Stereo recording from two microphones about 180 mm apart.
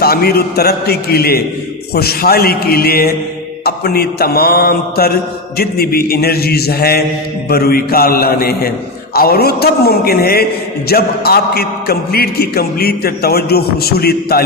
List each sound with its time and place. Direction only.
0.0 s a man's voice: 60° left (ahead or behind)